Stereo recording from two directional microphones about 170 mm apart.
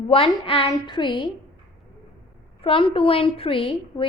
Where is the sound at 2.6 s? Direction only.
30° left (ahead or behind).